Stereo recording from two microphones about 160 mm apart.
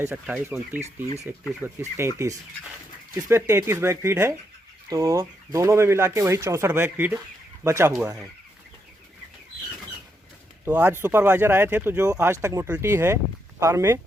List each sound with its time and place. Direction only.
0.0 s speech: 10° right (ahead or behind)
7.9 s speech: 5° right (ahead or behind)
10.7 s speech: 10° right (ahead or behind)